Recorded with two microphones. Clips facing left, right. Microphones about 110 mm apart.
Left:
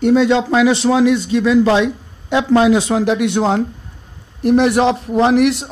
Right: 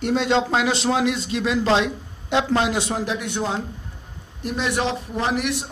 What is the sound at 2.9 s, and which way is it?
Speech, 75° left (ahead or behind).